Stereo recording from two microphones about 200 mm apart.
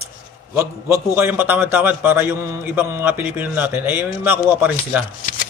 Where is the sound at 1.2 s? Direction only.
10° right (ahead or behind).